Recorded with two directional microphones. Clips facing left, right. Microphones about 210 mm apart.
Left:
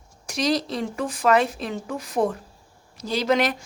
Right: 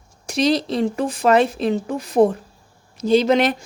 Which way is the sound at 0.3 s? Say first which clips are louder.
Right 5 dB; 25° right (ahead or behind).